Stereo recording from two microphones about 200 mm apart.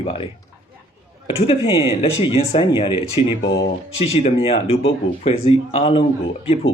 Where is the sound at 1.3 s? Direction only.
30° left (ahead or behind).